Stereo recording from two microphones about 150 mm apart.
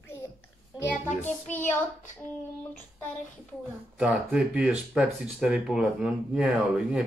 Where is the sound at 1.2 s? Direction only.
10° left (ahead or behind).